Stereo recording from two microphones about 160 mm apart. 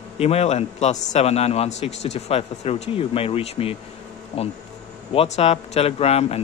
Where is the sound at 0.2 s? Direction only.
40° left (ahead or behind).